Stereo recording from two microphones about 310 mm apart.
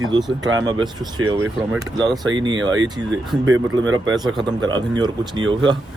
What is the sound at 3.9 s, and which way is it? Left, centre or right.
Speech, centre.